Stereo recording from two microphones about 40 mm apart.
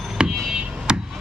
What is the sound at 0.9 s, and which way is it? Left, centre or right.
Chop, right.